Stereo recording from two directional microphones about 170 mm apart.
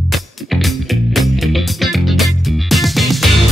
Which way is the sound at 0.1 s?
Centre (ahead or behind).